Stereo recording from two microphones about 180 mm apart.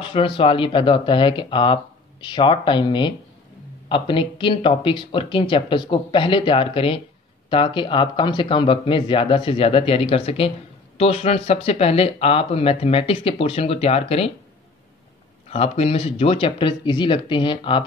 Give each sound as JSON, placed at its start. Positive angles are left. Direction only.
{"t": 0.0, "sound": "speech", "side_deg": 30}
{"t": 15.5, "sound": "speech", "side_deg": 35}